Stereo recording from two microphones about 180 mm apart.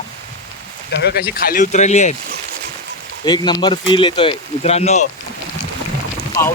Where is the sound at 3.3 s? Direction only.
20° left (ahead or behind).